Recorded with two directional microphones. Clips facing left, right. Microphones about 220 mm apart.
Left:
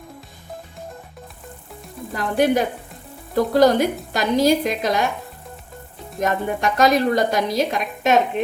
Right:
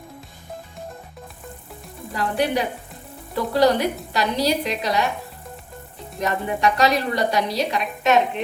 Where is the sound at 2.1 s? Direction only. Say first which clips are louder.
Left 4 dB; 45° left (ahead or behind).